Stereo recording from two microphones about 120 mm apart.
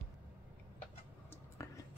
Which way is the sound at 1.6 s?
25° left (ahead or behind).